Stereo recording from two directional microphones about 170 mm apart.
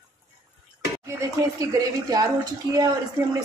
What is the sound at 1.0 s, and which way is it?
A woman's voice, 20° right (ahead or behind).